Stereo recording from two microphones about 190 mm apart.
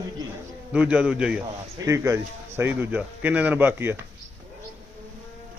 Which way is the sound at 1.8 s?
15° right (ahead or behind).